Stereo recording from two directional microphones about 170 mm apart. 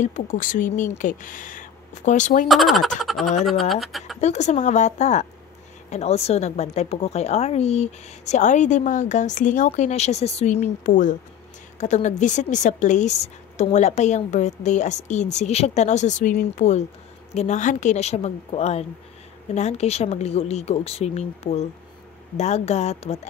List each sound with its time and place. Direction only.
0.0 s a woman's voice: 45° left (ahead or behind)
2.4 s speech: centre (ahead or behind)
4.2 s a woman's voice: 40° left (ahead or behind)